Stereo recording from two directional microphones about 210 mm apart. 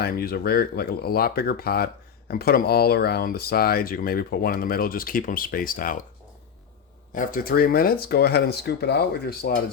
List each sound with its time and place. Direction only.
0.0 s speech: 45° left (ahead or behind)
7.1 s speech: 40° left (ahead or behind)